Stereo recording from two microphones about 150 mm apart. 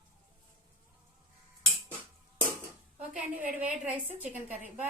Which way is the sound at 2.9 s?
10° right (ahead or behind).